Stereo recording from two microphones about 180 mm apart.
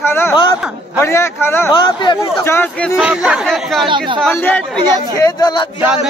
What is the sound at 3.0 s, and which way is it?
Speech, 5° right (ahead or behind).